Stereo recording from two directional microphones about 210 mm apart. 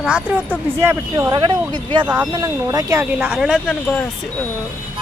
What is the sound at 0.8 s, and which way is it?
Speech, 10° right (ahead or behind).